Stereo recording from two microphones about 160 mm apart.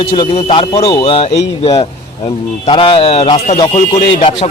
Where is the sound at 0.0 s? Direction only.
30° left (ahead or behind).